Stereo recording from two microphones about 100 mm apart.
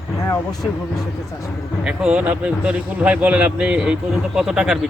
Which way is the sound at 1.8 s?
10° right (ahead or behind).